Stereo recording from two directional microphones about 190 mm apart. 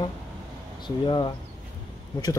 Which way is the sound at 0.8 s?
25° left (ahead or behind).